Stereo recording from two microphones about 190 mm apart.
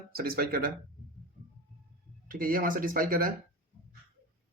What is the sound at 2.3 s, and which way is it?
Speech, 50° right (ahead or behind).